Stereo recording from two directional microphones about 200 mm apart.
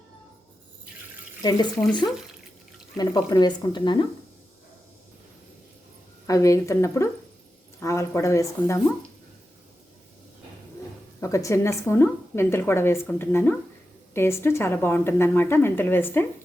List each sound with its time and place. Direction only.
1.4 s speech: 20° left (ahead or behind)
3.0 s speech: 20° left (ahead or behind)
6.2 s a woman's voice: 15° left (ahead or behind)
11.2 s a woman's voice: 15° left (ahead or behind)